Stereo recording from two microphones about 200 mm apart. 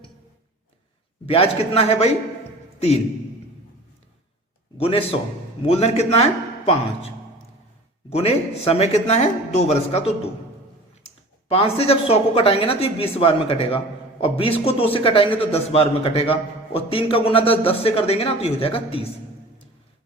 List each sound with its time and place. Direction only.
1.3 s a man's voice: 30° left (ahead or behind)
4.8 s a man's voice: 30° left (ahead or behind)
8.1 s a man's voice: 30° left (ahead or behind)
11.4 s a man's voice: 30° left (ahead or behind)